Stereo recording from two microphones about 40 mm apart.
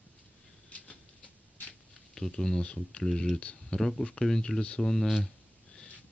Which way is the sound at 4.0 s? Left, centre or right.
Left.